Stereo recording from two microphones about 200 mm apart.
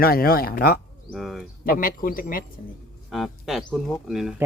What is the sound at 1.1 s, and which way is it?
Speech, centre (ahead or behind).